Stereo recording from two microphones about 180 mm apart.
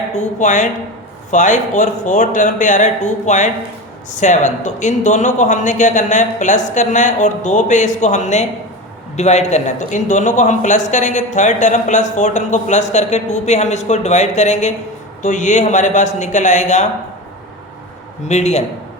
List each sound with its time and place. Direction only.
0.1 s a man's voice: 40° left (ahead or behind)
18.3 s speech: 40° left (ahead or behind)